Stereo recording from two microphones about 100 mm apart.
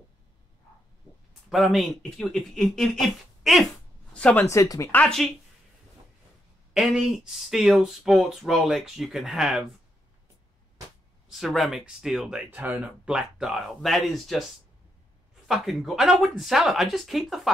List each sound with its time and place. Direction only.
1.5 s speech: centre (ahead or behind)
4.1 s speech: 10° left (ahead or behind)
4.5 s speech: 30° left (ahead or behind)
4.9 s speech: 5° left (ahead or behind)
6.7 s speech: 5° right (ahead or behind)
11.2 s speech: centre (ahead or behind)
12.4 s speech: 15° right (ahead or behind)
15.4 s speech: centre (ahead or behind)